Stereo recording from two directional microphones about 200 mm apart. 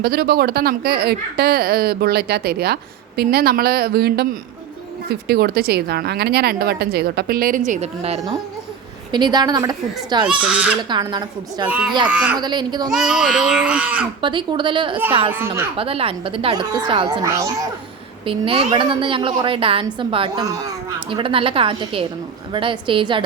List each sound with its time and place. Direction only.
0.0 s a woman's voice: 50° right (ahead or behind)
5.3 s a woman's voice: 50° right (ahead or behind); by 10.2 s 20° right (ahead or behind)
10.2 s speech: 5° right (ahead or behind)
10.8 s a woman's voice: 20° right (ahead or behind)
11.7 s speech: 5° right (ahead or behind)
12.4 s a woman's voice: 20° right (ahead or behind)
13.1 s speech: centre (ahead or behind)
14.2 s a woman's voice: 25° right (ahead or behind)